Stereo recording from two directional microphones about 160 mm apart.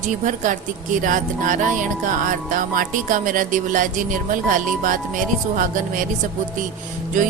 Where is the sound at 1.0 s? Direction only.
55° right (ahead or behind).